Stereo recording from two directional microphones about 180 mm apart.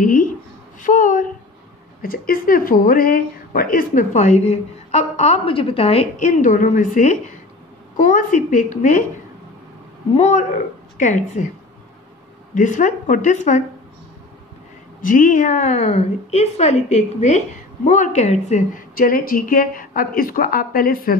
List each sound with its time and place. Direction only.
0.0 s a sound: 45° left (ahead or behind)
2.0 s a woman's voice: 55° left (ahead or behind)
11.0 s a woman's voice: 45° left (ahead or behind)
12.5 s a woman's voice: 45° left (ahead or behind)
15.0 s a woman's voice: 50° left (ahead or behind)